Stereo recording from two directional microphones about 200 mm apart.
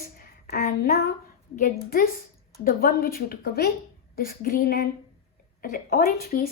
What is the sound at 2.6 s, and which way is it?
A woman's voice, 45° left (ahead or behind).